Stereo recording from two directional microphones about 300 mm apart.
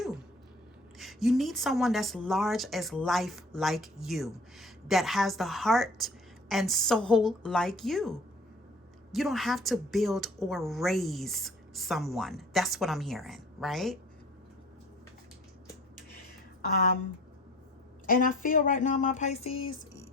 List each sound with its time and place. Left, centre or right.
0.9 s speech: centre
18.0 s speech: left